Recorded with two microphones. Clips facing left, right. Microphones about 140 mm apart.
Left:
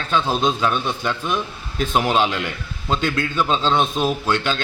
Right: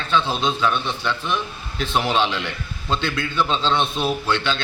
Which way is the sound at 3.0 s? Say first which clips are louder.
Left 2 dB; 45° left (ahead or behind).